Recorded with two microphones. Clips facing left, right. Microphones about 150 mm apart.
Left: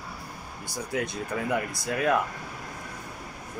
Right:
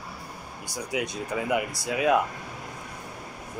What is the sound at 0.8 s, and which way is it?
Speech, 15° right (ahead or behind).